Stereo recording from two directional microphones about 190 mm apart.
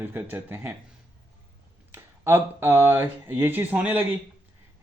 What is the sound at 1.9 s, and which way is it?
Speech, 10° right (ahead or behind).